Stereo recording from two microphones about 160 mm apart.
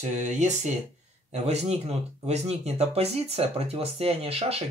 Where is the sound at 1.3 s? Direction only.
45° right (ahead or behind).